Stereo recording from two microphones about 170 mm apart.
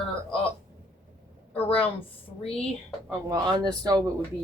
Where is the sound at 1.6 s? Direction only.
35° left (ahead or behind).